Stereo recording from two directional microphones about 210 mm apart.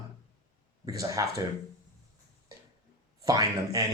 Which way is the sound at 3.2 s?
20° right (ahead or behind).